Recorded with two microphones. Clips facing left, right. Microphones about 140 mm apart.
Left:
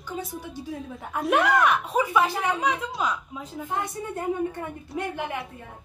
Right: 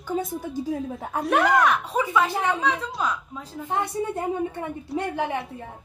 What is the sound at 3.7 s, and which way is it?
A woman's voice, 25° right (ahead or behind).